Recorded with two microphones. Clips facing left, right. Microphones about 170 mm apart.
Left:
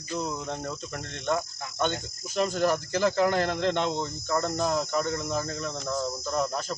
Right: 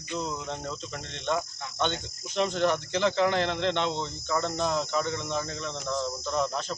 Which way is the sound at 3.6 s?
45° left (ahead or behind).